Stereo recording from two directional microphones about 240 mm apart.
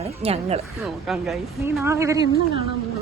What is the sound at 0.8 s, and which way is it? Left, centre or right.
Speech, centre.